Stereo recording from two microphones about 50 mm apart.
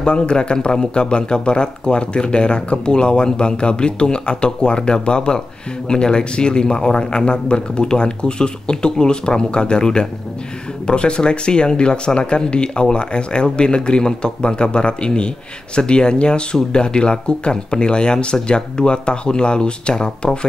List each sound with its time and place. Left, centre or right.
0.0 s speech: centre